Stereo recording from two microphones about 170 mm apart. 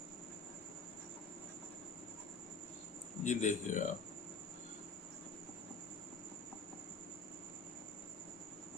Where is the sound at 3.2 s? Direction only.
45° left (ahead or behind).